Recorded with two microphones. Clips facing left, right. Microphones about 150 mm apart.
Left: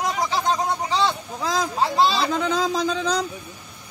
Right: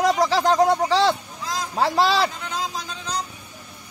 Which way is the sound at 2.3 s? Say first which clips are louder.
Left 8 dB; 90° left.